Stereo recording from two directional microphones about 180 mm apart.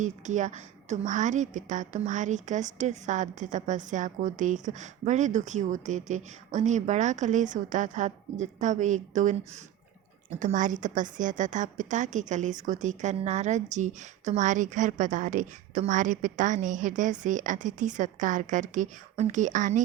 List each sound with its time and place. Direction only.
0.0 s a woman's voice: 45° right (ahead or behind)
10.4 s a woman's voice: 45° right (ahead or behind)